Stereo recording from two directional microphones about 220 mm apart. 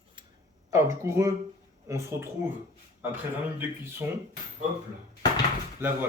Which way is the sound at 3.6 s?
10° right (ahead or behind).